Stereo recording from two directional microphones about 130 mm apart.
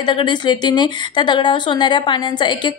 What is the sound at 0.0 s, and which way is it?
A woman's voice, 40° left (ahead or behind).